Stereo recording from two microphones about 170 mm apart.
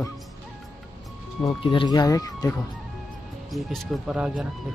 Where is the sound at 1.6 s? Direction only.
30° left (ahead or behind).